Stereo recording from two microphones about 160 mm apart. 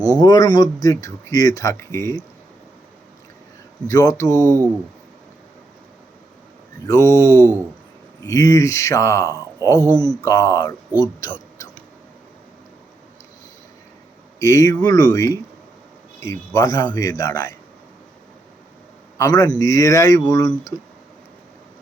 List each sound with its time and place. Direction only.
0.0 s speech: 25° left (ahead or behind)
3.8 s speech: 20° left (ahead or behind)
4.4 s speech: 20° right (ahead or behind)
6.8 s speech: 20° left (ahead or behind)
7.3 s speech: 15° right (ahead or behind)
8.2 s speech: 20° left (ahead or behind)
14.3 s speech: 20° left (ahead or behind)
19.1 s a man's voice: 20° left (ahead or behind)